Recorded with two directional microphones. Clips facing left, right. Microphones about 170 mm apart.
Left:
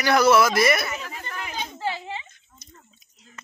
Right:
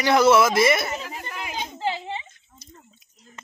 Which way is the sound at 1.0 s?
10° right (ahead or behind).